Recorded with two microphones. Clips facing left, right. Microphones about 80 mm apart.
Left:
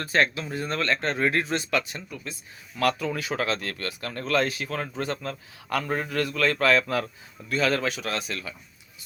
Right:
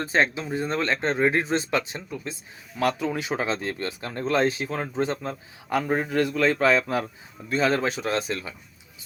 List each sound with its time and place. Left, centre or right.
0.0 s speech: right